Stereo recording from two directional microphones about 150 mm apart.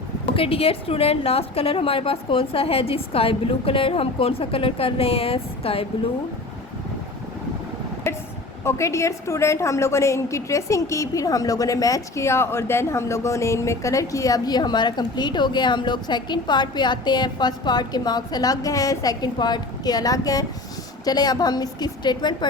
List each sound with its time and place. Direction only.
0.3 s a woman's voice: 40° left (ahead or behind)
8.1 s a sound: 20° left (ahead or behind)
8.6 s a woman's voice: 20° left (ahead or behind)